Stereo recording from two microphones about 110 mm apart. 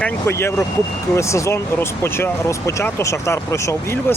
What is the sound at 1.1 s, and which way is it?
Speech, 25° left (ahead or behind).